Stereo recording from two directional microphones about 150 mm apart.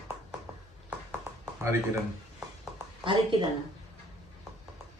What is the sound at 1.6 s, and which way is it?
Speech, 20° right (ahead or behind).